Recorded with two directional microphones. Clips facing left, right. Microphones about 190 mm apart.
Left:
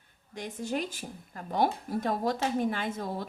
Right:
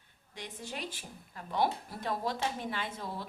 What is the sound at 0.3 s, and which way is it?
Speech, 45° left (ahead or behind).